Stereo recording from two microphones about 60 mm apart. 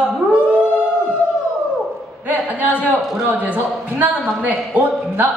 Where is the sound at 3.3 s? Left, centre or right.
Right.